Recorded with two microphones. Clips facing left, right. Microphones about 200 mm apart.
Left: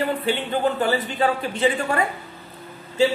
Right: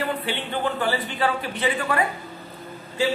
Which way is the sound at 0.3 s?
45° left (ahead or behind).